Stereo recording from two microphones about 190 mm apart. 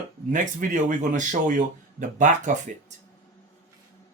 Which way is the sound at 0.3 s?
45° right (ahead or behind).